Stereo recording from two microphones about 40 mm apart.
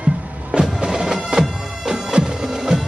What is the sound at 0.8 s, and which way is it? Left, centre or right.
Bagpipes, centre.